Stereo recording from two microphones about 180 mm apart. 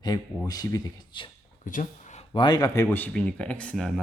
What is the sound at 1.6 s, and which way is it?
Speech, 45° left (ahead or behind).